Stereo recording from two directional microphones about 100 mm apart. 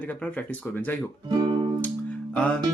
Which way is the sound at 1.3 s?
50° right (ahead or behind).